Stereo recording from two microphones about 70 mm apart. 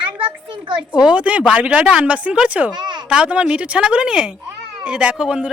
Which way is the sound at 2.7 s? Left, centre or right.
Right.